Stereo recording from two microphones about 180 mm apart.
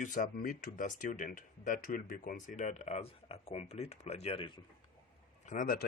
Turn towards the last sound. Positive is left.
turn(degrees=55)  # may be behind; listen again after turning